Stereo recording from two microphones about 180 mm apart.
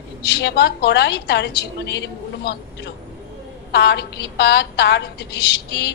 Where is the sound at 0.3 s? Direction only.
65° left (ahead or behind).